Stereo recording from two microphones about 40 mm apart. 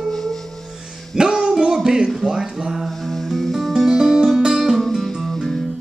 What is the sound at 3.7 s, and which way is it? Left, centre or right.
Music, centre.